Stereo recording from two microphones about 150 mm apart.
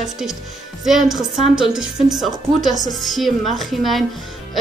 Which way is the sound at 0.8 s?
5° right (ahead or behind).